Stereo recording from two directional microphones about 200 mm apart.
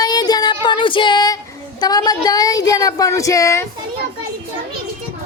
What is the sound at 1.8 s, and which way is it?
Speech, 20° left (ahead or behind).